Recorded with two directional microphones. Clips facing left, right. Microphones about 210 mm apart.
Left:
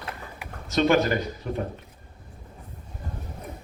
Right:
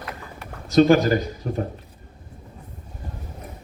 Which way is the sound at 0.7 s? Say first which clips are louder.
Right 6 dB; 35° right (ahead or behind).